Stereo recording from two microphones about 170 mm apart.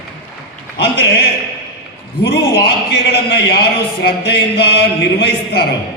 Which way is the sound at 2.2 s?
70° left (ahead or behind).